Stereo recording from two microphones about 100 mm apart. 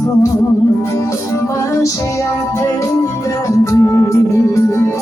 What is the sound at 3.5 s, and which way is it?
Music, 30° left (ahead or behind).